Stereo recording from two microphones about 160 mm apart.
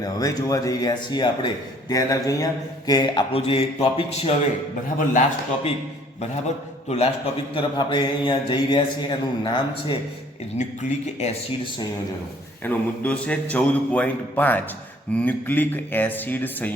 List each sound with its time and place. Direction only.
0.0 s mantra: 20° left (ahead or behind)
3.3 s speech: 40° left (ahead or behind)
6.8 s a man's voice: 40° left (ahead or behind)
7.5 s mantra: 30° left (ahead or behind)
10.6 s speech: 45° left (ahead or behind)
12.6 s a man's voice: 10° left (ahead or behind)